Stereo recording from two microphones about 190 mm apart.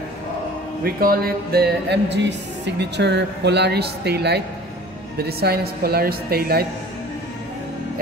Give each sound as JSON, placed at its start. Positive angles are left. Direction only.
{"t": 0.8, "sound": "music", "side_deg": -50}